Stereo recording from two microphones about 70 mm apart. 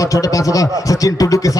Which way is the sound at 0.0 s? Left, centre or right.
Left.